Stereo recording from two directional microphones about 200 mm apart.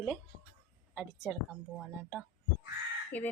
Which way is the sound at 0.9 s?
Centre (ahead or behind).